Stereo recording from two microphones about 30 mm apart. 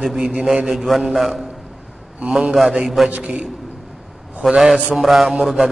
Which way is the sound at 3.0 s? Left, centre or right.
Right.